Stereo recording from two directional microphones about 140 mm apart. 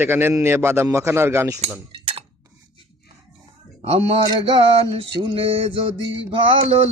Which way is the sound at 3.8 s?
45° right (ahead or behind).